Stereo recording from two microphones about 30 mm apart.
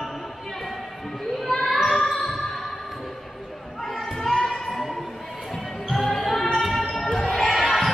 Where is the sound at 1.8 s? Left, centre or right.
Centre.